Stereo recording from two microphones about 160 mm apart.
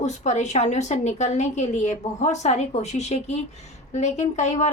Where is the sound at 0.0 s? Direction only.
45° left (ahead or behind).